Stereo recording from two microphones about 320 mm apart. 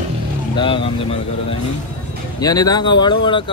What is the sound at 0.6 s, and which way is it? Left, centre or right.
Speech, centre.